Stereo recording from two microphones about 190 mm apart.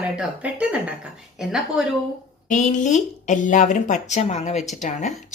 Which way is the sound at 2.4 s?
40° left (ahead or behind).